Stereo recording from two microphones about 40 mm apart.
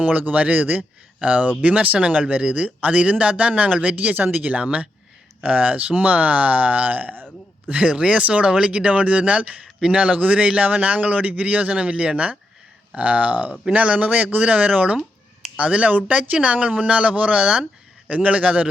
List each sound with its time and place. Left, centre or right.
0.0 s speech: right
4.1 s speech: right
4.4 s speech: right
7.8 s speech: right
13.0 s speech: right
13.7 s speech: right